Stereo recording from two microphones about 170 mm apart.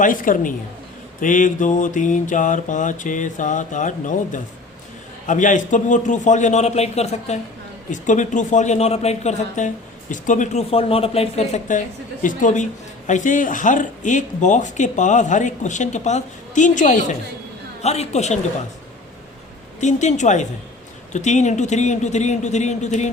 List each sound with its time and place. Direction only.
0.0 s a woman's voice: 50° left (ahead or behind)
19.8 s speech: 45° left (ahead or behind)